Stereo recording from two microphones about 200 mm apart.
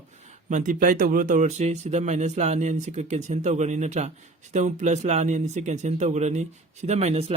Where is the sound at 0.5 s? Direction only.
40° right (ahead or behind).